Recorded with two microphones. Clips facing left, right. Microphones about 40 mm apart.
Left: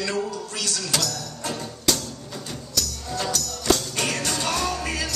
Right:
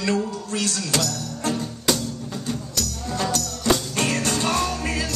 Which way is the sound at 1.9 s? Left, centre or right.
Centre.